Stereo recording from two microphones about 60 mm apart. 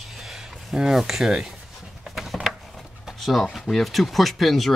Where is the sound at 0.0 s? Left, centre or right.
Centre.